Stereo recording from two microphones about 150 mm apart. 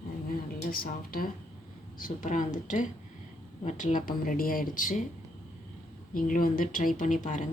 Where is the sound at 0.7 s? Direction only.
75° left (ahead or behind).